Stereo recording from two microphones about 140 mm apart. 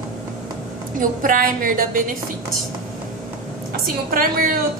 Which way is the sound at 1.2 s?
75° right (ahead or behind).